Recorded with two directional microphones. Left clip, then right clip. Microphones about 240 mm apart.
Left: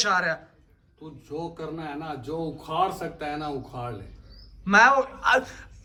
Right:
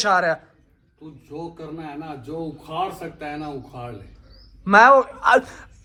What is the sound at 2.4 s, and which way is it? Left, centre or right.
Speech, centre.